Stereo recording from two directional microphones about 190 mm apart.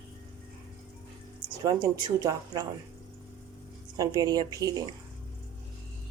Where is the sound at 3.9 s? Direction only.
20° right (ahead or behind).